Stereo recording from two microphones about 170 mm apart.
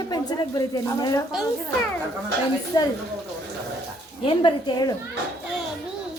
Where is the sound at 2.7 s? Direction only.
25° left (ahead or behind).